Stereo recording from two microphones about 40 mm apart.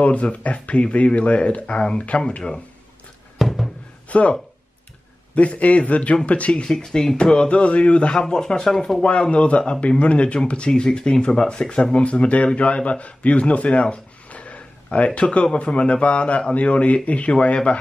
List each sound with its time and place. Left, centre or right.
0.0 s a man's voice: left
3.3 s music: centre
4.1 s a man's voice: left
6.6 s speech: centre
7.5 s a man's voice: left
8.2 s speech: centre
8.6 s speech: centre
9.0 s a man's voice: left